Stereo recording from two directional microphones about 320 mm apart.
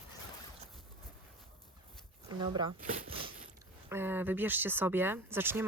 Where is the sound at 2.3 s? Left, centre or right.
Centre.